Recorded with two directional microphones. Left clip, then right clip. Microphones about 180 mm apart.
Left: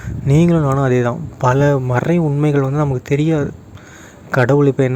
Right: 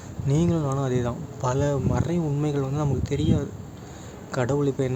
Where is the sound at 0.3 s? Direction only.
40° left (ahead or behind).